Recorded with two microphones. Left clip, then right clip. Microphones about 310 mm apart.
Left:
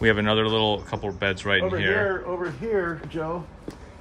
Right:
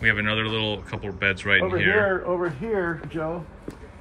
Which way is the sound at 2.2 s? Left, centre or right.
Right.